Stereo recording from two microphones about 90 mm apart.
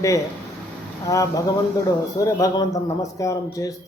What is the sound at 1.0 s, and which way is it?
A man's voice, 40° left (ahead or behind).